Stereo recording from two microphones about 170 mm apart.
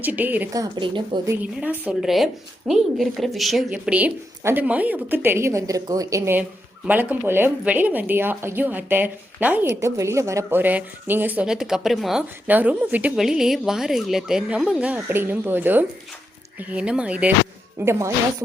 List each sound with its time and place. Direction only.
0.0 s a woman's voice: 10° right (ahead or behind)
0.5 s a woman's voice: 25° right (ahead or behind)
1.5 s a woman's voice: 10° right (ahead or behind)